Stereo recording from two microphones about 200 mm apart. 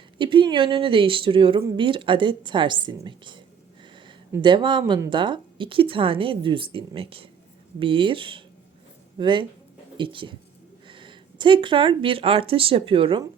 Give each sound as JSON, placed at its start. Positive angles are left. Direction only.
{"t": 0.2, "sound": "a woman's voice", "side_deg": -25}